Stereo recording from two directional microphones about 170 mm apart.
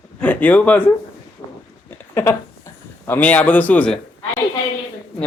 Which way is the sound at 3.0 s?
10° left (ahead or behind).